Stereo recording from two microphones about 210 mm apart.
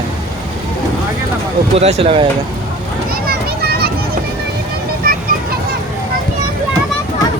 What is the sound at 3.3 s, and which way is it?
Children playing, 50° right (ahead or behind).